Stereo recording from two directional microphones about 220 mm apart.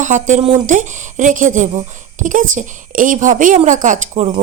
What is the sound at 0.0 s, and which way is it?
Speech, 35° right (ahead or behind).